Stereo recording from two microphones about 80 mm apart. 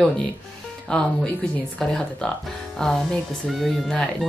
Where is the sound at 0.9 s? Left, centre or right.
Centre.